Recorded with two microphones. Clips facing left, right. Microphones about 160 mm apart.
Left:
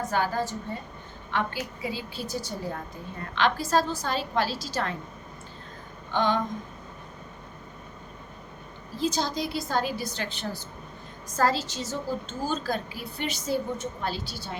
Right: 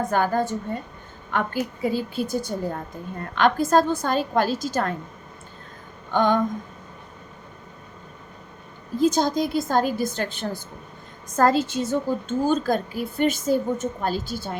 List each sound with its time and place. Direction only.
0.0 s a woman's voice: 50° right (ahead or behind)
6.1 s a woman's voice: 50° right (ahead or behind)
9.0 s a woman's voice: 50° right (ahead or behind)